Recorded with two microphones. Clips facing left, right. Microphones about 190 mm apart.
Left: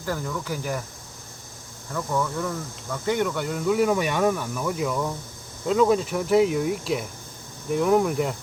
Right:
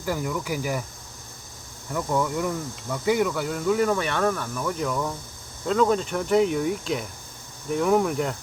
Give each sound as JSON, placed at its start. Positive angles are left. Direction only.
{"t": 0.0, "sound": "speech", "side_deg": -10}
{"t": 1.9, "sound": "speech", "side_deg": -10}